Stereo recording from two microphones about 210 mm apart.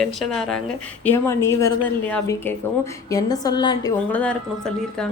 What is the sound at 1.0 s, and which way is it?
A woman's voice, 10° left (ahead or behind).